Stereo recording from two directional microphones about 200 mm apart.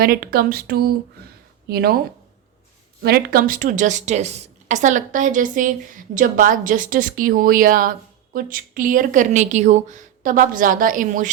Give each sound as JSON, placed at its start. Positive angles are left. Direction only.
{"t": 0.0, "sound": "speech", "side_deg": -50}
{"t": 3.0, "sound": "a woman's voice", "side_deg": -50}